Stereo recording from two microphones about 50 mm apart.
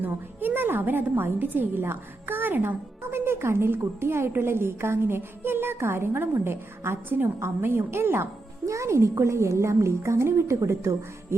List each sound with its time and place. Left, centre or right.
0.0 s a woman's voice: right
8.6 s a woman's voice: right